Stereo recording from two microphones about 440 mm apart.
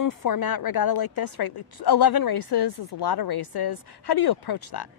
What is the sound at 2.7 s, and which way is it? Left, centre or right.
Speech, left.